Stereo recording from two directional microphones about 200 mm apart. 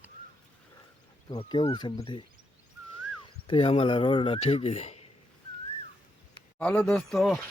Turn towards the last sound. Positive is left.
turn(degrees=0)  # may be behind; listen again after turning